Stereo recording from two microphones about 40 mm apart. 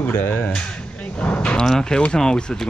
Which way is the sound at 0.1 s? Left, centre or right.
Left.